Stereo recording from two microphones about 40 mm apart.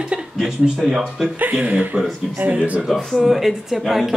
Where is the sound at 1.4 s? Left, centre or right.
Right.